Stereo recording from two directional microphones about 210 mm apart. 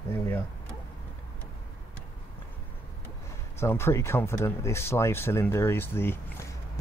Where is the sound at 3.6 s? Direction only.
10° left (ahead or behind).